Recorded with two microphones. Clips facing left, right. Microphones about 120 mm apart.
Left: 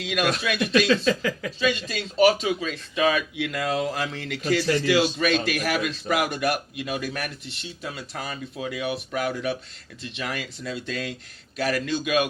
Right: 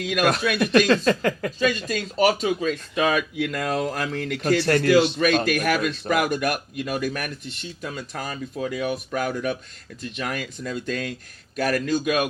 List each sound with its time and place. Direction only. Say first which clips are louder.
0.0 s speech: right 3 dB; 45° right (ahead or behind)
5.2 s speech: right 3 dB; 45° right (ahead or behind)